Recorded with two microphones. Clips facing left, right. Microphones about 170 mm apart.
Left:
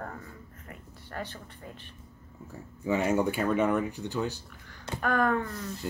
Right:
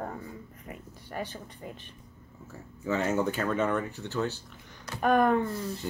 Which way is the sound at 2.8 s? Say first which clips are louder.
Left 1 dB; 10° left (ahead or behind).